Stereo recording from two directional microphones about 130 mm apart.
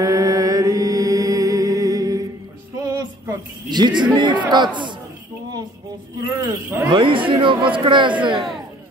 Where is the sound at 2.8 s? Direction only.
25° right (ahead or behind).